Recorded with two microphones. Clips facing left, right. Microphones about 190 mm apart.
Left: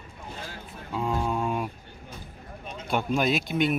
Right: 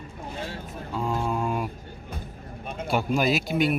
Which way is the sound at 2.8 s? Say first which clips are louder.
Right 1 dB; 5° right (ahead or behind).